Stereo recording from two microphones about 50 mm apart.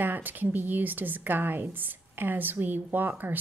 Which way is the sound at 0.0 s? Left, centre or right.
Right.